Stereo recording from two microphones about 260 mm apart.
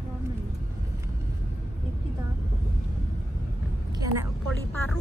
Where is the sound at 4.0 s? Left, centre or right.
Centre.